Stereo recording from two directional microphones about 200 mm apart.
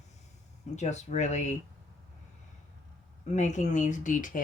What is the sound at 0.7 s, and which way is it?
Speech, 35° left (ahead or behind).